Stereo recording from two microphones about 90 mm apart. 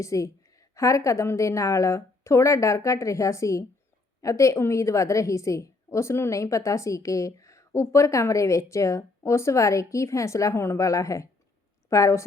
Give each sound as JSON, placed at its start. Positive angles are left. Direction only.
{"t": 0.0, "sound": "a woman's voice", "side_deg": 35}